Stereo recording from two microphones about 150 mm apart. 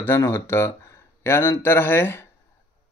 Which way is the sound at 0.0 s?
15° left (ahead or behind).